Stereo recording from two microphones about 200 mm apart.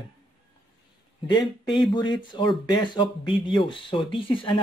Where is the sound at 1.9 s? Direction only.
25° left (ahead or behind).